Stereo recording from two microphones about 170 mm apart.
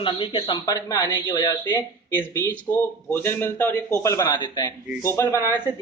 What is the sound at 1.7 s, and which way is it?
Speech, 15° left (ahead or behind).